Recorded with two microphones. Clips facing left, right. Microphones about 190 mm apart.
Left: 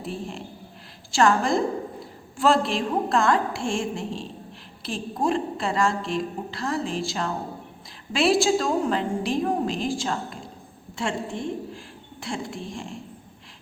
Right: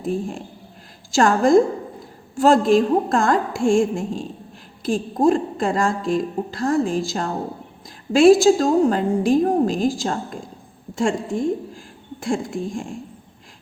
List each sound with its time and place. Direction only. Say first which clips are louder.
0.0 s a woman's voice: right 8 dB; 45° right (ahead or behind)